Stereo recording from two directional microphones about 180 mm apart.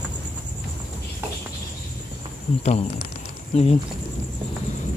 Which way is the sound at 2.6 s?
35° left (ahead or behind).